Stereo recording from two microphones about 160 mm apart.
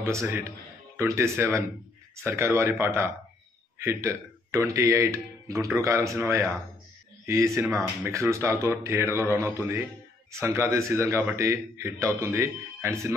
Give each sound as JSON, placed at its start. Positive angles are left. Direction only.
{"t": 0.0, "sound": "a man's voice", "side_deg": -15}